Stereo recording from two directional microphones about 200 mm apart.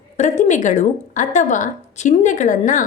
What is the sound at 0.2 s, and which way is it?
A woman's voice, 35° left (ahead or behind).